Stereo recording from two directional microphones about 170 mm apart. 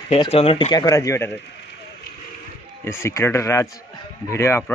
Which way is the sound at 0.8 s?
20° left (ahead or behind).